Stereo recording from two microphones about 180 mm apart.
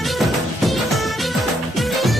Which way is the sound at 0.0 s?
Centre (ahead or behind).